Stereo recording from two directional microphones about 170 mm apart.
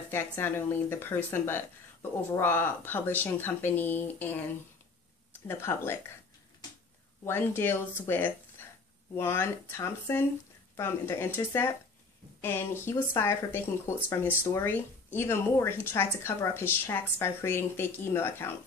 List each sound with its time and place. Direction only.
0.1 s speech: 15° left (ahead or behind)
5.5 s speech: 15° left (ahead or behind)
7.2 s speech: 15° left (ahead or behind)